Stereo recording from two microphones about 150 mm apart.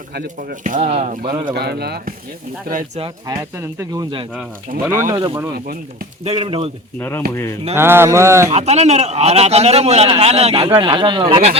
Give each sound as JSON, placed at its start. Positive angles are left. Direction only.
{"t": 0.1, "sound": "speech", "side_deg": -75}
{"t": 1.5, "sound": "speech", "side_deg": -90}
{"t": 2.6, "sound": "speech", "side_deg": -60}
{"t": 3.2, "sound": "speech", "side_deg": -20}
{"t": 4.9, "sound": "a sound", "side_deg": -15}
{"t": 6.2, "sound": "speech", "side_deg": -40}
{"t": 7.8, "sound": "a sound", "side_deg": -15}
{"t": 8.4, "sound": "a man's voice", "side_deg": -45}
{"t": 10.8, "sound": "speech", "side_deg": -30}